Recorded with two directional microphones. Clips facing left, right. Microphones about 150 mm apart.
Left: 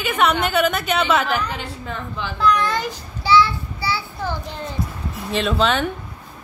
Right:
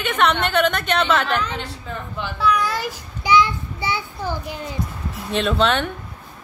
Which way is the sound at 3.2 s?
15° right (ahead or behind).